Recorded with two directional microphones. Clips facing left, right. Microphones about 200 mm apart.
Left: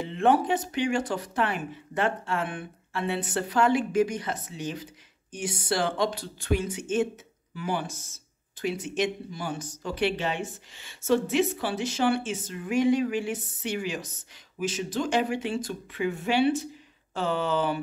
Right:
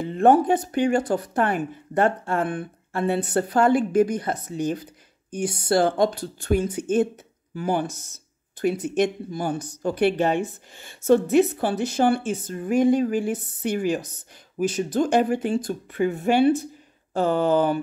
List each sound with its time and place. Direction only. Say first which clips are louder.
0.0 s speech: right 6 dB; 45° right (ahead or behind)